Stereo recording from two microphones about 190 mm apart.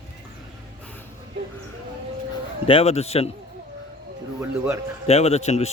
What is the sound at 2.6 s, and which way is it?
Speech, 30° left (ahead or behind).